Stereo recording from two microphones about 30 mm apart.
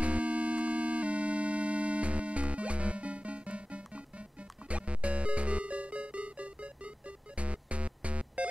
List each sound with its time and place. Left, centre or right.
0.0 s music: right